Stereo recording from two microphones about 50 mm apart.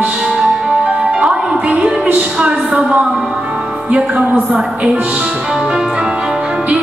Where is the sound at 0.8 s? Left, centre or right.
Centre.